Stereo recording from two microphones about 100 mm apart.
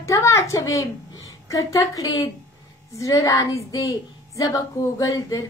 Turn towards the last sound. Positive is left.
turn(degrees=35)  # may be behind; listen again after turning